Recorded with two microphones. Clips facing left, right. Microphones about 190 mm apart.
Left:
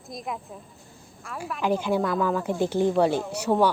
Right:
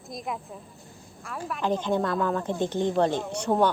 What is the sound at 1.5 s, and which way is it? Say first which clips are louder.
Speech: left 2 dB; 10° left (ahead or behind).